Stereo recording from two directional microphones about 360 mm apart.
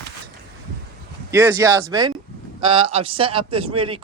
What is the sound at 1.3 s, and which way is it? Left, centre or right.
A man's voice, centre.